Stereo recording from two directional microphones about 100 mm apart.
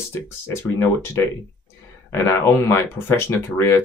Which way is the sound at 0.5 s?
30° left (ahead or behind).